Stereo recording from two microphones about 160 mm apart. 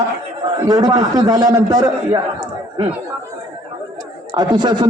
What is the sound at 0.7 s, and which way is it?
A man's voice, 25° right (ahead or behind).